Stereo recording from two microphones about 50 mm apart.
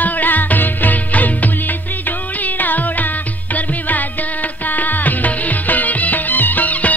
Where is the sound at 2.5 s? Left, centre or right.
Left.